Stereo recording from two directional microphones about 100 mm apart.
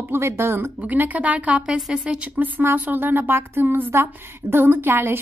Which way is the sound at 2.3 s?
15° right (ahead or behind).